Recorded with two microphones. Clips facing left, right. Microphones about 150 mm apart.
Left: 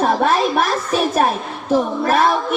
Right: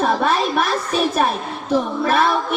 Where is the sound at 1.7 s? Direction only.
45° left (ahead or behind).